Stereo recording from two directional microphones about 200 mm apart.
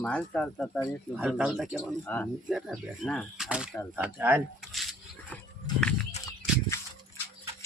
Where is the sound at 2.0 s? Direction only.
10° left (ahead or behind).